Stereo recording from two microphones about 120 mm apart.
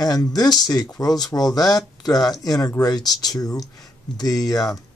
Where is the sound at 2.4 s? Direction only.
35° left (ahead or behind).